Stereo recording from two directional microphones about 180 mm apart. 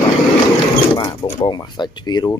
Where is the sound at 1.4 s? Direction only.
20° left (ahead or behind).